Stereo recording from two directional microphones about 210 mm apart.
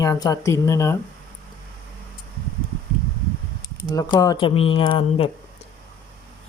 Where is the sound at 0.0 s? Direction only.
15° left (ahead or behind).